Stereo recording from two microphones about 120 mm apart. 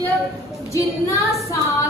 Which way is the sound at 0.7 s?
25° left (ahead or behind).